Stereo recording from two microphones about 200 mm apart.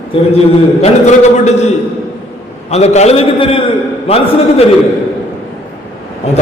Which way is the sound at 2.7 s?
35° left (ahead or behind).